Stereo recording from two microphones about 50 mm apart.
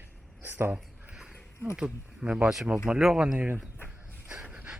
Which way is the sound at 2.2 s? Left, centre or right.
Right.